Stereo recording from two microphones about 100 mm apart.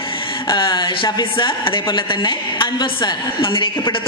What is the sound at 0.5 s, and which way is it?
Speech, 55° left (ahead or behind).